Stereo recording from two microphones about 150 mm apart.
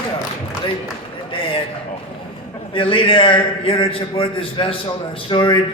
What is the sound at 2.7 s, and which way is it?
Speech, 35° left (ahead or behind).